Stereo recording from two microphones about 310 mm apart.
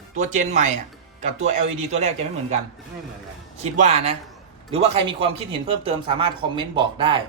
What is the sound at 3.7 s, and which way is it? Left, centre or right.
A man's voice, right.